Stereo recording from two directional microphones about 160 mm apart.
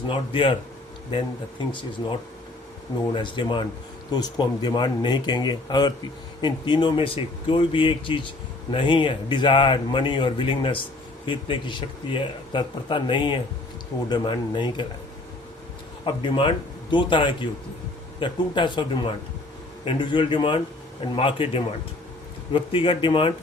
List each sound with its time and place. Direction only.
0.1 s speech: 35° left (ahead or behind)
16.0 s speech: 35° left (ahead or behind)